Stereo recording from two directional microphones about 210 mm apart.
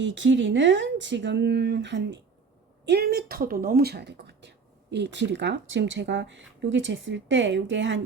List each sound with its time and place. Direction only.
0.0 s speech: 60° right (ahead or behind)